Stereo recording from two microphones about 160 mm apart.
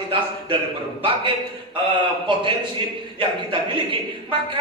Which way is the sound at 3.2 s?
30° right (ahead or behind).